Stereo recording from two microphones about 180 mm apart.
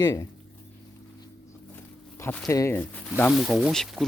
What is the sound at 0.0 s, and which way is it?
Speech, 20° left (ahead or behind).